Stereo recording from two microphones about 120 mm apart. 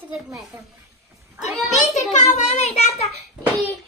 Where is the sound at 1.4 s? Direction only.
75° left (ahead or behind).